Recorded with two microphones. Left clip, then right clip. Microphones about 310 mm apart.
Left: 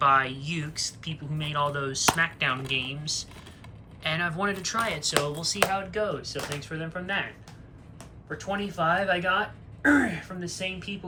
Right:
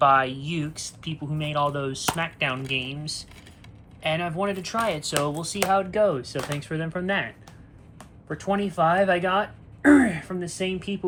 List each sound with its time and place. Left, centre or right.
0.0 s speech: centre
0.7 s speech: centre
1.0 s speech: centre; by 7.3 s right
8.4 s speech: right